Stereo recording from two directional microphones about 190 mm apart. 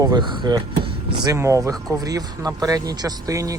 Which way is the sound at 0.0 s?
20° right (ahead or behind).